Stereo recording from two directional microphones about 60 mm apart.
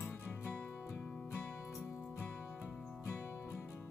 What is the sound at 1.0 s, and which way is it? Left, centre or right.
Music, centre.